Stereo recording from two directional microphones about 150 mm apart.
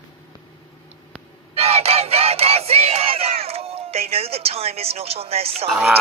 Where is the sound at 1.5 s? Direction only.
40° right (ahead or behind).